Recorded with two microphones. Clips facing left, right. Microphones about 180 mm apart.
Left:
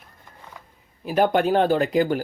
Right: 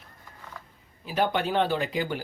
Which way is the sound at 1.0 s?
50° left (ahead or behind).